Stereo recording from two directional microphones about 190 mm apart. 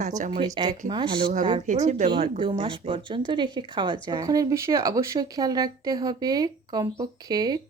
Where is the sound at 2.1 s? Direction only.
25° right (ahead or behind).